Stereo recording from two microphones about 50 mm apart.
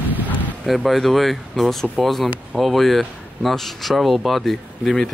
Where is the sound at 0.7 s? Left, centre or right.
Centre.